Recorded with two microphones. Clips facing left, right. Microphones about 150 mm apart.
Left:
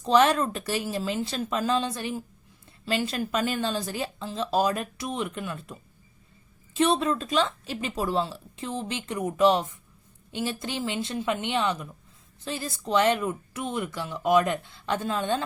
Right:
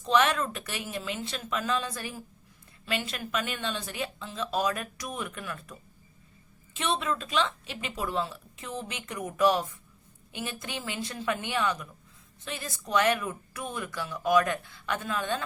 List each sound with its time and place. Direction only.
0.0 s speech: 35° left (ahead or behind)
6.7 s speech: 35° left (ahead or behind)